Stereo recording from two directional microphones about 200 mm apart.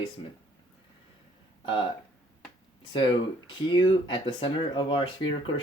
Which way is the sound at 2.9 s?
25° left (ahead or behind).